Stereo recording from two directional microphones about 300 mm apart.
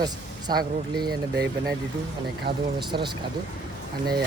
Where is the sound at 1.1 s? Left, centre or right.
Right.